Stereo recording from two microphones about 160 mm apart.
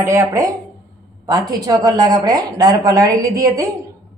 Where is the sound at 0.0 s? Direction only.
15° right (ahead or behind).